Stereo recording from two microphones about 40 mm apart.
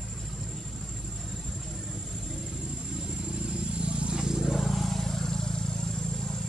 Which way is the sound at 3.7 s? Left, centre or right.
Right.